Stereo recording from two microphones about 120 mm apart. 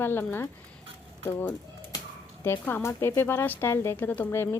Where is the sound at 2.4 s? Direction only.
20° left (ahead or behind).